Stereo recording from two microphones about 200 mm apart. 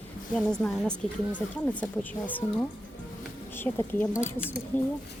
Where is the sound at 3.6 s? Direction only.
10° left (ahead or behind).